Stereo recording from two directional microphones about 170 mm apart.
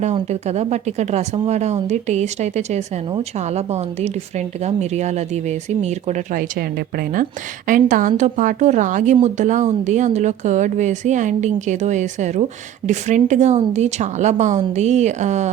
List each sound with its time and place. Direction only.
0.0 s a woman's voice: 40° right (ahead or behind)
6.6 s a woman's voice: 65° right (ahead or behind); by 15.4 s 45° right (ahead or behind)